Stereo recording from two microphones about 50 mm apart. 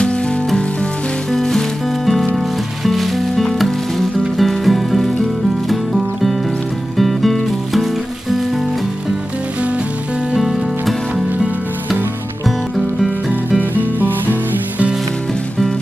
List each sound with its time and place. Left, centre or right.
1.3 s music: centre
7.0 s music: centre
10.3 s music: centre
12.4 s music: centre
13.3 s music: right